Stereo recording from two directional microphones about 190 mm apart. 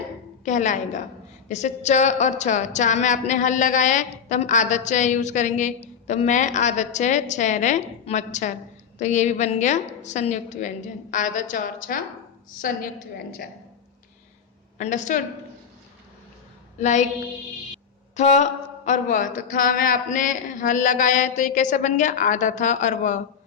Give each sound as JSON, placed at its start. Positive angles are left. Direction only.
{"t": 0.4, "sound": "a woman's voice", "side_deg": 40}
{"t": 14.8, "sound": "a woman's voice", "side_deg": 40}
{"t": 16.8, "sound": "a woman's voice", "side_deg": 40}
{"t": 18.2, "sound": "a woman's voice", "side_deg": 35}